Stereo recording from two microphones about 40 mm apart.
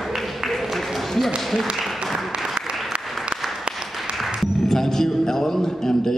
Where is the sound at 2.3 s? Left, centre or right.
Centre.